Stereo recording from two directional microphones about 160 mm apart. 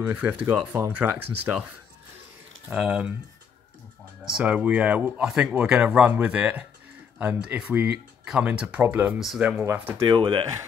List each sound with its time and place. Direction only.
0.0 s speech: 10° right (ahead or behind)
2.7 s speech: 10° right (ahead or behind)
4.2 s speech: 5° right (ahead or behind)
10.0 s speech: 30° right (ahead or behind)